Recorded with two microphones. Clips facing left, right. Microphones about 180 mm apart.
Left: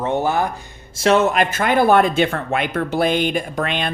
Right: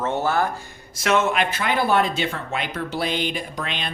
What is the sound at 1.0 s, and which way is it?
Speech, 35° left (ahead or behind).